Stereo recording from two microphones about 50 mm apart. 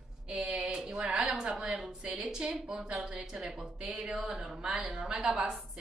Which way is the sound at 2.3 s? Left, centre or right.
Centre.